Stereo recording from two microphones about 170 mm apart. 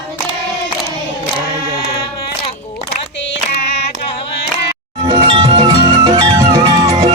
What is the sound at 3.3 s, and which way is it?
Female singing, 85° left.